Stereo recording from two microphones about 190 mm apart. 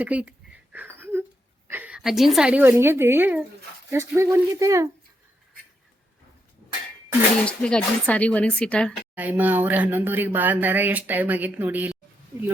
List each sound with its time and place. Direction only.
0.0 s a sound: 5° right (ahead or behind)
1.6 s speech: 10° right (ahead or behind)
7.4 s speech: 5° left (ahead or behind)
9.1 s speech: 10° right (ahead or behind)